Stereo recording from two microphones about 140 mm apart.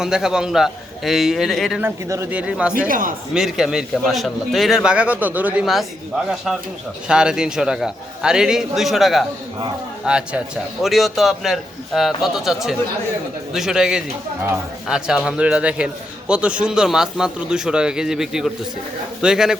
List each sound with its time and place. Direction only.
0.0 s a man's voice: 5° right (ahead or behind)
1.8 s speech: 20° right (ahead or behind)
2.3 s speech: 10° right (ahead or behind)
2.7 s a man's voice: 75° right (ahead or behind)
3.3 s a man's voice: 5° right (ahead or behind)